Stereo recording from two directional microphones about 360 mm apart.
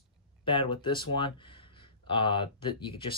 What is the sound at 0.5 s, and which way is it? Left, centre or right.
Speech, centre.